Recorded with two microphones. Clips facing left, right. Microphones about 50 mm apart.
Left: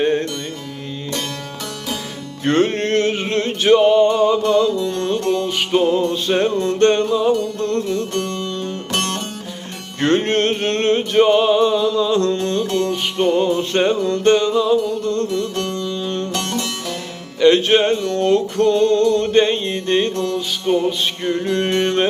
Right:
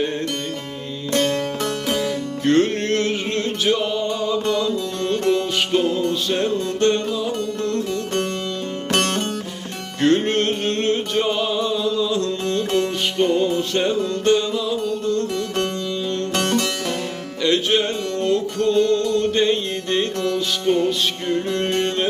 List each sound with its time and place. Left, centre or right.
0.0 s music: left
1.1 s music: right
2.4 s music: left
8.1 s music: right
10.0 s music: left
13.1 s music: left
15.5 s music: right
15.8 s music: left
16.3 s music: right
17.4 s music: left
20.1 s music: right
20.7 s music: centre
21.2 s music: left